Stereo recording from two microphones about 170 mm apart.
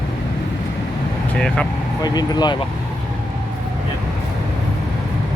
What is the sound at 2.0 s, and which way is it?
Speech, 25° left (ahead or behind).